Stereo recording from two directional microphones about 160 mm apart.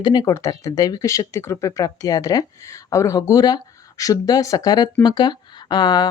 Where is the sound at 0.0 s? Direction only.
25° left (ahead or behind).